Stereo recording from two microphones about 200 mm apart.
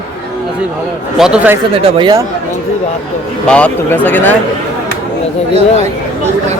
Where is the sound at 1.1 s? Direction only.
5° right (ahead or behind).